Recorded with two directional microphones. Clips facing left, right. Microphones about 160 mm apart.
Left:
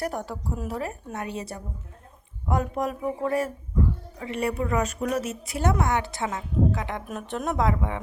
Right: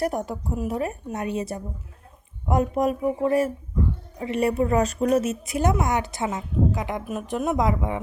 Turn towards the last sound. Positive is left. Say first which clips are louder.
# right 2 dB
turn(degrees=-15)  # may be behind; listen again after turning